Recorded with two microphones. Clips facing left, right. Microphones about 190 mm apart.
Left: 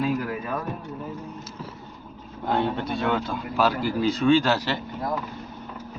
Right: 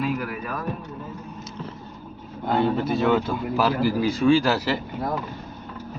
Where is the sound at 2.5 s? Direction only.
5° right (ahead or behind).